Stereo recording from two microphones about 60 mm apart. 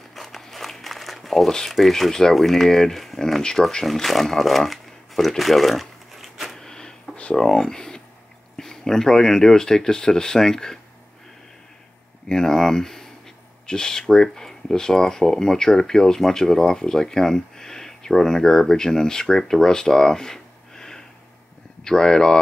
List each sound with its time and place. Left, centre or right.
0.1 s speech: centre
6.6 s a sound: centre
7.2 s speech: centre
12.3 s speech: centre